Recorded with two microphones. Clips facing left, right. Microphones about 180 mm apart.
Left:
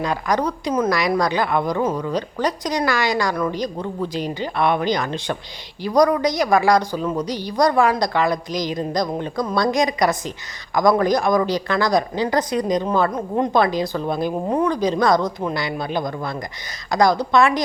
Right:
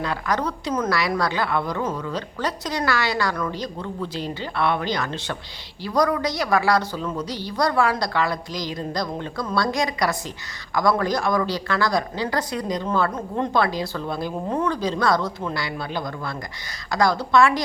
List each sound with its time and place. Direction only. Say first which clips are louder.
0.0 s a woman's voice: left 4 dB; 15° left (ahead or behind)